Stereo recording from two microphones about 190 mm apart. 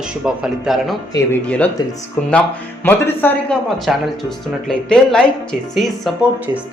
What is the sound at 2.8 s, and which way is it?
Speech, 10° left (ahead or behind).